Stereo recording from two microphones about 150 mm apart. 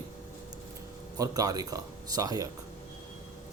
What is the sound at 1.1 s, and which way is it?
Speech, 25° right (ahead or behind).